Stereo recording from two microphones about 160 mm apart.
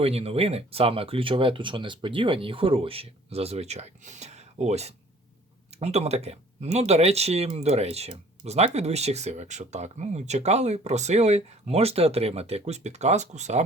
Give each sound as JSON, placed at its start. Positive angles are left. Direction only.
{"t": 0.0, "sound": "speech", "side_deg": -40}